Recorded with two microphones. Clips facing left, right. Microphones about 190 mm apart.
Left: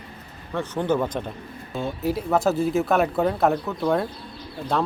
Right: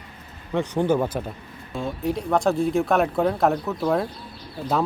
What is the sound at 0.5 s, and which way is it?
Speech, 15° right (ahead or behind).